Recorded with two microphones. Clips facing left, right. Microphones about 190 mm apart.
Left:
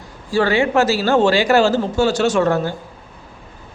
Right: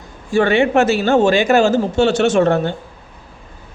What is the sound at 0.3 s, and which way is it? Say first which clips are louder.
A man's voice: right 2 dB; 25° right (ahead or behind).